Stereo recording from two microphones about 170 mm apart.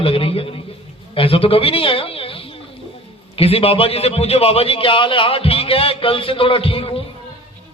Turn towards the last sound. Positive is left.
turn(degrees=35)  # may be behind; listen again after turning